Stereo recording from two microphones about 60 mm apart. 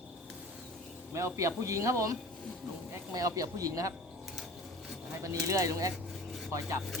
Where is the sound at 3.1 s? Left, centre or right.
Right.